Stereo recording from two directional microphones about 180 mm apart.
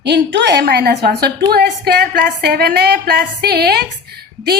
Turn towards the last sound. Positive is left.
turn(degrees=-60)  # may be behind; listen again after turning